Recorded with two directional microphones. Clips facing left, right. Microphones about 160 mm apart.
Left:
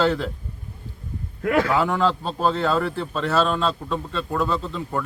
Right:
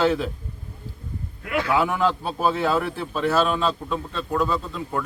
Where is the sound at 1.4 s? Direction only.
45° left (ahead or behind).